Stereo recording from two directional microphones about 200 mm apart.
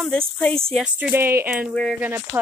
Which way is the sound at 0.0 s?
5° left (ahead or behind).